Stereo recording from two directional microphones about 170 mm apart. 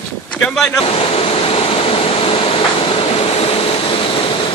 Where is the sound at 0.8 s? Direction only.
35° left (ahead or behind).